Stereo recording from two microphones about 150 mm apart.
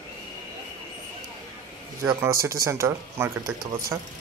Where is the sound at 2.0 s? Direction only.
20° right (ahead or behind).